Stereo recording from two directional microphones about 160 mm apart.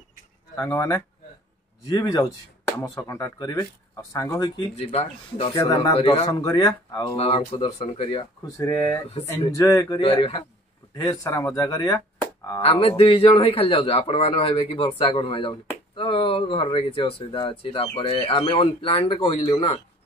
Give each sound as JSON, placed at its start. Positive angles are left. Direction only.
{"t": 0.6, "sound": "speech", "side_deg": 20}
{"t": 4.9, "sound": "speech", "side_deg": 40}
{"t": 6.2, "sound": "speech", "side_deg": 25}
{"t": 7.2, "sound": "speech", "side_deg": 35}
{"t": 8.5, "sound": "speech", "side_deg": 20}
{"t": 9.9, "sound": "speech", "side_deg": 35}
{"t": 11.0, "sound": "speech", "side_deg": 20}
{"t": 12.6, "sound": "speech", "side_deg": 35}